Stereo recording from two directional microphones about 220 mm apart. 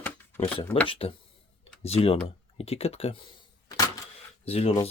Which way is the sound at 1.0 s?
25° left (ahead or behind).